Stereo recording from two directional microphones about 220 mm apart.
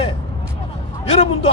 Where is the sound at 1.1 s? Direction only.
30° left (ahead or behind).